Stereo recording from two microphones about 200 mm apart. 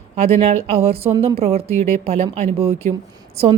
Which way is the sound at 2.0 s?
30° right (ahead or behind).